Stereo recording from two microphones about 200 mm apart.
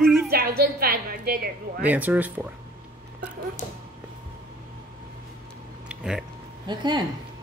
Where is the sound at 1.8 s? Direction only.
10° right (ahead or behind).